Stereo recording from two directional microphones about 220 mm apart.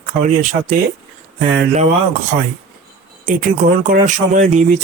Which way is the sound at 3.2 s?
35° right (ahead or behind).